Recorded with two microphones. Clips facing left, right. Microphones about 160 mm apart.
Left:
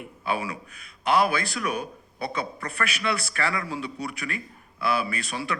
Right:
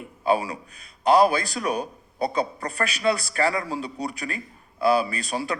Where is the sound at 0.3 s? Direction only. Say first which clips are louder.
Right 6 dB; 35° right (ahead or behind).